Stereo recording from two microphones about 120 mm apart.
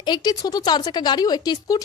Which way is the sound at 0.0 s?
35° left (ahead or behind).